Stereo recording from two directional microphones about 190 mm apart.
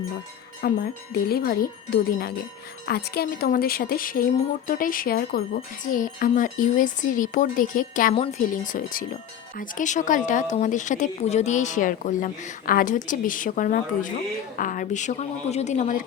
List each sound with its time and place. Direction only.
0.6 s speech: 50° left (ahead or behind)
8.1 s a woman's voice: 35° left (ahead or behind)